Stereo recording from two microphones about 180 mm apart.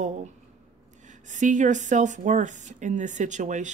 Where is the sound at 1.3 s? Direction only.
45° right (ahead or behind).